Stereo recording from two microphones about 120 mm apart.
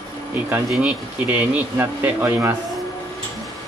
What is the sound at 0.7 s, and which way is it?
Speech, 10° right (ahead or behind).